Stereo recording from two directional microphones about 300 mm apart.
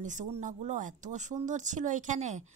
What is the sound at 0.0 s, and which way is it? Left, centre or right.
A woman's voice, right.